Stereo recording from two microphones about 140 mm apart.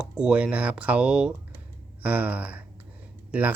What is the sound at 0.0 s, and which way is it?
Speech, 5° right (ahead or behind).